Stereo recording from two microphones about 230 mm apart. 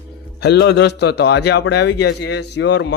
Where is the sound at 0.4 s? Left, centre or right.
Left.